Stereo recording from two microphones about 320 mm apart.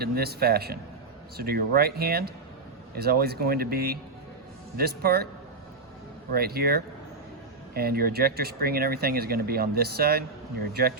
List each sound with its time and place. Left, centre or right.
0.0 s speech: right
6.3 s speech: right